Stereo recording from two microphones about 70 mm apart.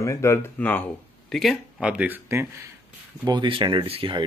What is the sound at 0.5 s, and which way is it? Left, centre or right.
Speech, left.